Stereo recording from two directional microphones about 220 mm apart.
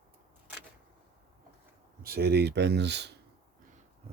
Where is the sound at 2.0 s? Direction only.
45° right (ahead or behind).